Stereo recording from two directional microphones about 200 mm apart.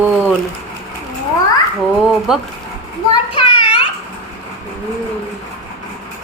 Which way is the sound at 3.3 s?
25° left (ahead or behind).